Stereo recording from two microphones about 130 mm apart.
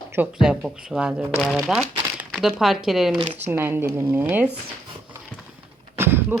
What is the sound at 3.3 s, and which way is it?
A woman's voice, 15° right (ahead or behind).